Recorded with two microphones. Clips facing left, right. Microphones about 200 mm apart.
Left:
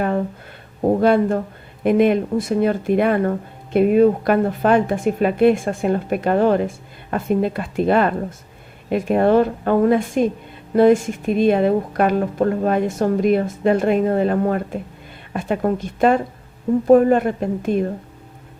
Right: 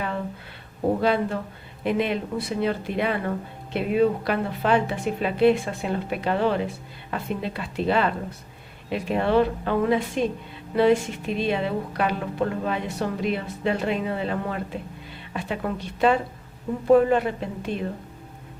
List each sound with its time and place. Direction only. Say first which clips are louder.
1.0 s speech: left 7 dB; 50° left (ahead or behind)